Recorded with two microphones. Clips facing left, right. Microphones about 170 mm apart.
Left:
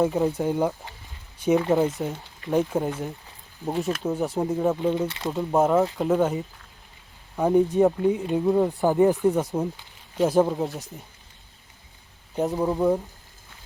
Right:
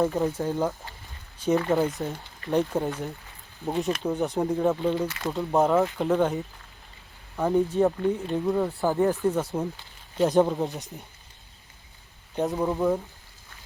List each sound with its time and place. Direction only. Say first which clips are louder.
0.0 s speech: left 2 dB; 15° left (ahead or behind)
2.5 s speech: left 1 dB; centre (ahead or behind)
4.8 s speech: left 2 dB; 15° left (ahead or behind)
5.0 s speech: left 1 dB; 25° left (ahead or behind)
5.5 s speech: left 1 dB; centre (ahead or behind)
7.3 s speech: left 3 dB; 15° left (ahead or behind)
10.2 s speech: left 1 dB; centre (ahead or behind)
12.4 s speech: left 2 dB; centre (ahead or behind)
12.7 s speech: left 4 dB; 15° left (ahead or behind)